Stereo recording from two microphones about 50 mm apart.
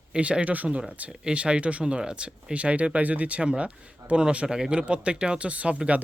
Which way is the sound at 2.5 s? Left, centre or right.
Right.